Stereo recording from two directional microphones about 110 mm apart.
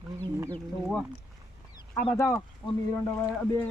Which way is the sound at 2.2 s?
25° left (ahead or behind).